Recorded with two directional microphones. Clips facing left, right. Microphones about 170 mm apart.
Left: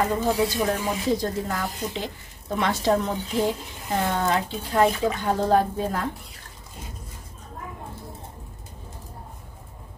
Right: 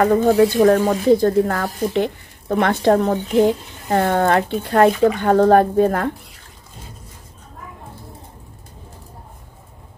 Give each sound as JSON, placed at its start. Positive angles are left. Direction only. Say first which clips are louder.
{"t": 0.0, "sound": "speech", "louder": "right 9 dB", "side_deg": -60}
{"t": 1.0, "sound": "speech", "louder": "right 11 dB", "side_deg": -60}